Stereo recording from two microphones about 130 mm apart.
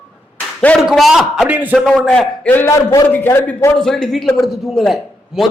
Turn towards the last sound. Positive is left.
turn(degrees=0)  # may be behind; listen again after turning